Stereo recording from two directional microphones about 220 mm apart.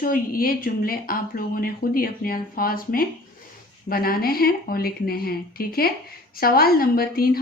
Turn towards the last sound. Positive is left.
turn(degrees=40)  # may be behind; listen again after turning